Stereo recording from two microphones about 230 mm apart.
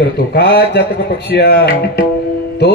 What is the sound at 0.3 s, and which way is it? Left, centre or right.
Music, left.